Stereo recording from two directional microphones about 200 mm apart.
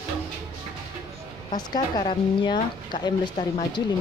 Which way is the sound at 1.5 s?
20° left (ahead or behind).